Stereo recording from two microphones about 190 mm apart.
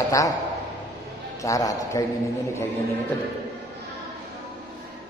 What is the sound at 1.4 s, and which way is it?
Speech, 20° left (ahead or behind).